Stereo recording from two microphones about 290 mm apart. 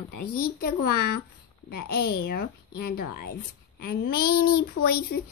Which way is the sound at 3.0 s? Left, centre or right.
Left.